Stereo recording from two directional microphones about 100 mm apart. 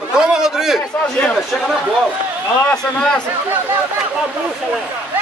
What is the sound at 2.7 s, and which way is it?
Speech, 5° left (ahead or behind).